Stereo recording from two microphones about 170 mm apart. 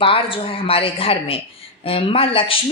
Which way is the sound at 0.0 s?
30° left (ahead or behind).